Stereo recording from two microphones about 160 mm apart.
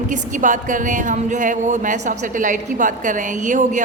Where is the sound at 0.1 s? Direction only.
55° right (ahead or behind).